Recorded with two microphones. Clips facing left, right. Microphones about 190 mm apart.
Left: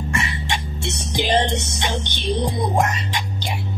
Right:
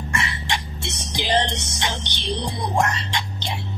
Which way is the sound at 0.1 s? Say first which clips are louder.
Even; 20° left (ahead or behind).